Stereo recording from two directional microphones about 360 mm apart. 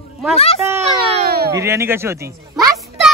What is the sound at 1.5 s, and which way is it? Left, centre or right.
Speech, centre.